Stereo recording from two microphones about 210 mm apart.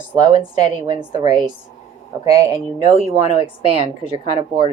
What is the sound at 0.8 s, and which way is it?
Speech, 20° right (ahead or behind).